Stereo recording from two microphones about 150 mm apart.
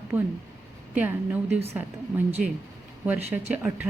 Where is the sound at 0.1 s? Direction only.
10° right (ahead or behind).